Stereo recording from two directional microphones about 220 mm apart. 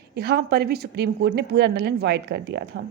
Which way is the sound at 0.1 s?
50° right (ahead or behind).